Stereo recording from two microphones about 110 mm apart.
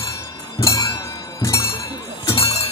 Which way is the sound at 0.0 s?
30° left (ahead or behind).